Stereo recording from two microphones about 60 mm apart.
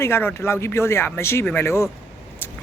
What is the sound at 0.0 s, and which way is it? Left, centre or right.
Speech, left.